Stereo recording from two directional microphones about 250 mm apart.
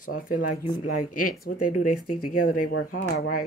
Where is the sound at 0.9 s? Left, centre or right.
Left.